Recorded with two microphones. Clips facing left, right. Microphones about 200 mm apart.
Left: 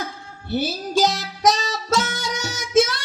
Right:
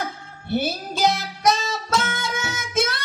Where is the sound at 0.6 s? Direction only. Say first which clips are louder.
Left 4 dB; 55° right (ahead or behind).